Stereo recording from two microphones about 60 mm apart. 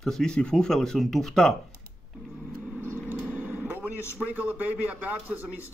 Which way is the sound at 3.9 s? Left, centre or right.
Left.